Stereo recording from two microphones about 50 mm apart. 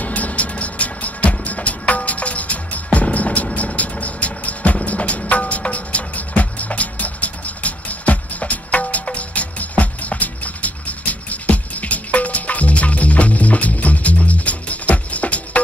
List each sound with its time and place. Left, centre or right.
0.0 s music: left